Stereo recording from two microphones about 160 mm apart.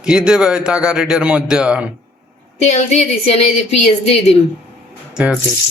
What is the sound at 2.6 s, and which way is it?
A woman's voice, 45° left (ahead or behind).